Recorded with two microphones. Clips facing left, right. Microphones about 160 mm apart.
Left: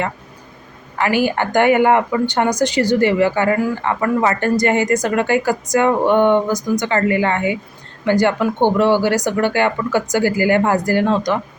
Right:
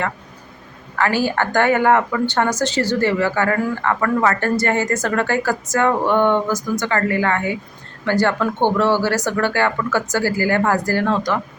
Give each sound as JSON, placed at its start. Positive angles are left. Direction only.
{"t": 0.9, "sound": "speech", "side_deg": 15}